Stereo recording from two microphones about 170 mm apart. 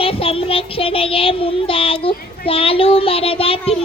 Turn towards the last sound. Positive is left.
turn(degrees=35)  # may be behind; listen again after turning